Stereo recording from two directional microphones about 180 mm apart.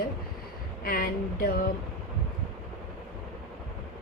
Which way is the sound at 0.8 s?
55° left (ahead or behind).